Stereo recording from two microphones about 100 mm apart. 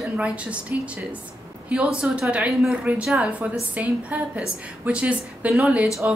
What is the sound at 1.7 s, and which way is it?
A woman's voice, 10° right (ahead or behind).